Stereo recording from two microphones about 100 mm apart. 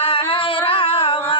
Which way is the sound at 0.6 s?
65° left (ahead or behind).